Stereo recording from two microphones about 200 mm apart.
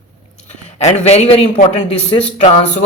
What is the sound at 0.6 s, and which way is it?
Speech, 35° left (ahead or behind).